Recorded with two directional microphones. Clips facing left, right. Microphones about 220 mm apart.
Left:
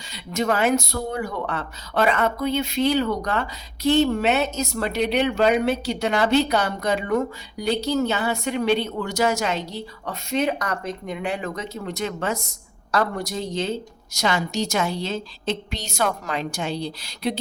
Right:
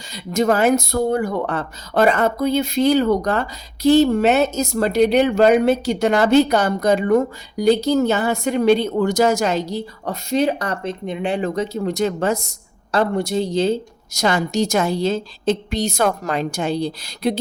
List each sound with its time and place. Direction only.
0.1 s speech: 40° right (ahead or behind)
12.9 s speech: 25° right (ahead or behind)
14.2 s a woman's voice: 50° right (ahead or behind)